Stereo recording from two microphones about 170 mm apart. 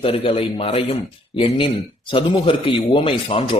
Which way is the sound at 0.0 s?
35° left (ahead or behind).